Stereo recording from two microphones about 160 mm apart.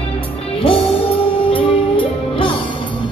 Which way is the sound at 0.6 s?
35° left (ahead or behind).